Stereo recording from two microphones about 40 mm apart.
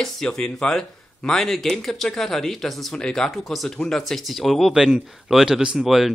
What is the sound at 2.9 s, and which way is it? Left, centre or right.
Speech, centre.